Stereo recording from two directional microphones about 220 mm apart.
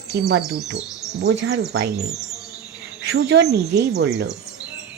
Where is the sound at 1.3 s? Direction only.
50° right (ahead or behind).